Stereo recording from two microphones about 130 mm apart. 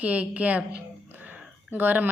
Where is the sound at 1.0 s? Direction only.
15° right (ahead or behind).